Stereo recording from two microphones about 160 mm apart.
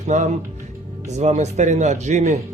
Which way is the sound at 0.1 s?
50° right (ahead or behind).